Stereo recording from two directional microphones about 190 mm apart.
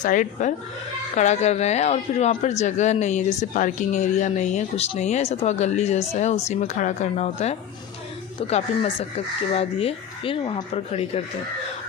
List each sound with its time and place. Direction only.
0.0 s speech: 40° left (ahead or behind)